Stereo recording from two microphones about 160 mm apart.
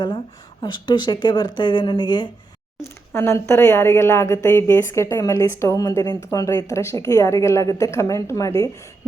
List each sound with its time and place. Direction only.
0.6 s speech: 30° left (ahead or behind)
3.1 s a woman's voice: 15° left (ahead or behind)